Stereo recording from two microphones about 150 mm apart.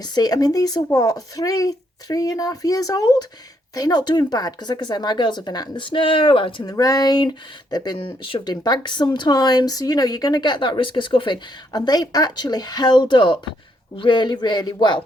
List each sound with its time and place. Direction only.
0.0 s speech: 25° left (ahead or behind)
6.7 s speech: 25° left (ahead or behind)